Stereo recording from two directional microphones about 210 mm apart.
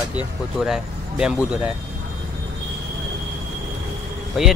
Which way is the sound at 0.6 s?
5° right (ahead or behind).